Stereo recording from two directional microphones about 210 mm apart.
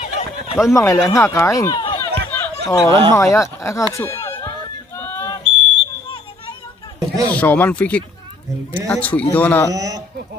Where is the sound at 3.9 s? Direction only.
15° left (ahead or behind).